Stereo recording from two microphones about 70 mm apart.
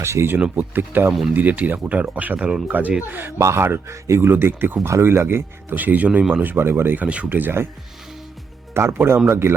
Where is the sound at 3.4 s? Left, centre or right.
Right.